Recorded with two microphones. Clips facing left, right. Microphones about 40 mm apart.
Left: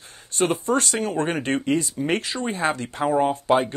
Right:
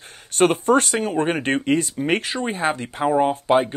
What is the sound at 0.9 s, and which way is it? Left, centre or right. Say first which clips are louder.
Speech: right 3 dB; centre.